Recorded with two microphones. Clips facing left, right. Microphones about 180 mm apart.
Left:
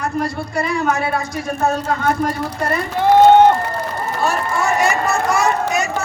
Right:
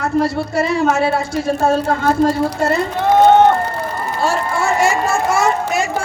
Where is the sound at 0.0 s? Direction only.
25° right (ahead or behind).